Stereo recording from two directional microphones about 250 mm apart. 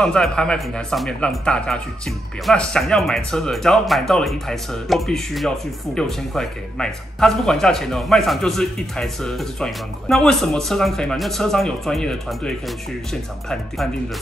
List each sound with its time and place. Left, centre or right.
0.0 s speech: centre